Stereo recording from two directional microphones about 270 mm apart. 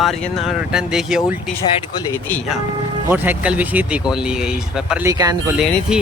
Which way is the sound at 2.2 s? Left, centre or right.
Centre.